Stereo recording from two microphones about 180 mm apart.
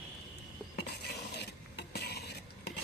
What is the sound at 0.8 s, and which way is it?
Stir, 65° left (ahead or behind).